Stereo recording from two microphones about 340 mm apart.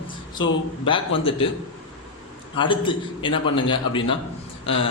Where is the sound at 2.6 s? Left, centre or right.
Centre.